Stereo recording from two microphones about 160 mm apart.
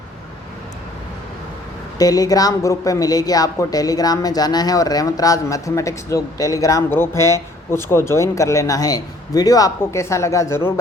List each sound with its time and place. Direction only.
2.0 s a woman's voice: 20° left (ahead or behind)